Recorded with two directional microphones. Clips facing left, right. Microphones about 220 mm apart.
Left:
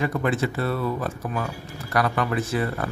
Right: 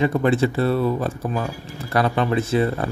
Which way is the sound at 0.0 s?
30° right (ahead or behind).